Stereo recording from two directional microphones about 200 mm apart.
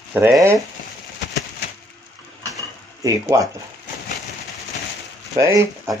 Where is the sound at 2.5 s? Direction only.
15° right (ahead or behind).